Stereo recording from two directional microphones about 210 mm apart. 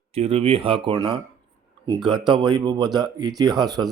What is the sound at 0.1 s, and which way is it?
Speech, 30° right (ahead or behind).